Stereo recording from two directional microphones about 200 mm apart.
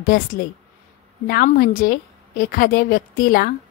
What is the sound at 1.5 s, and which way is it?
A woman's voice, 50° left (ahead or behind).